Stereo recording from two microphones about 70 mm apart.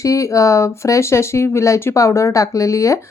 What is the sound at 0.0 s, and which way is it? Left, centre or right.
Speech, left.